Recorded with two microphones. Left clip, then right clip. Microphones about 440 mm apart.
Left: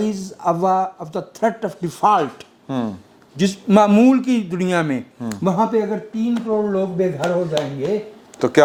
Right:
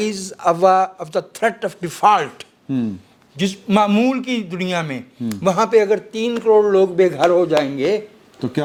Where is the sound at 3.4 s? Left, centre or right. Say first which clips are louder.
Left 2 dB; right.